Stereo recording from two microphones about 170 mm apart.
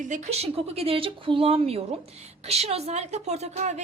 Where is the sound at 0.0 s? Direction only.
45° right (ahead or behind).